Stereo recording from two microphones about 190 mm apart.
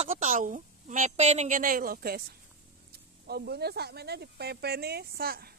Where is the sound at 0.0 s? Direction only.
40° right (ahead or behind).